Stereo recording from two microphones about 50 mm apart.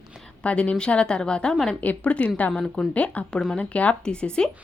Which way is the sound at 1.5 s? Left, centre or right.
Centre.